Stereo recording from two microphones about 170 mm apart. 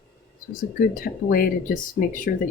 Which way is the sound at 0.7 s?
55° left (ahead or behind).